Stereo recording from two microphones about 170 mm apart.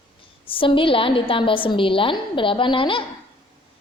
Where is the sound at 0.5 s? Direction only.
30° left (ahead or behind).